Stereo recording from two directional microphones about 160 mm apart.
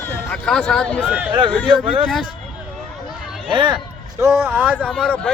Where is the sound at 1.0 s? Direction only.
10° right (ahead or behind).